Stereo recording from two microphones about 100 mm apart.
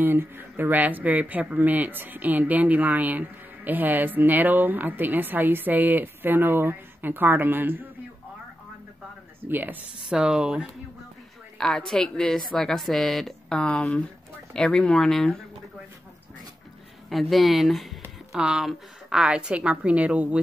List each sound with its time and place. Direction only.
0.0 s speech: 20° right (ahead or behind)
9.5 s a woman's voice: 20° right (ahead or behind)
11.5 s speech: 5° left (ahead or behind)
17.1 s a woman's voice: centre (ahead or behind)